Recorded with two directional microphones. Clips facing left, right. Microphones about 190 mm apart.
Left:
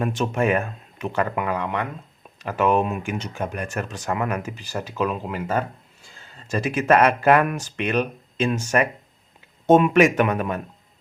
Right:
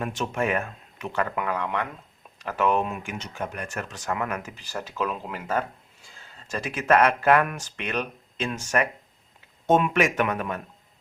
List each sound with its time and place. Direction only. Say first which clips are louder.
0.0 s speech: left 5 dB; 30° left (ahead or behind)
4.9 s speech: left 5 dB; 5° left (ahead or behind)
6.5 s speech: left 3 dB; 15° left (ahead or behind)